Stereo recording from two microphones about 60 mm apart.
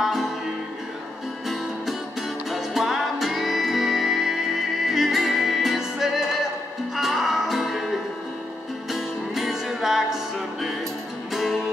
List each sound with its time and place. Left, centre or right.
0.0 s music: centre
2.5 s music: centre
8.9 s music: centre